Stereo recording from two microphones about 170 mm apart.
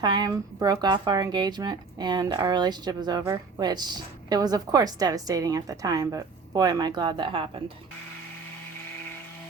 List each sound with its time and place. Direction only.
0.0 s speech: 25° right (ahead or behind)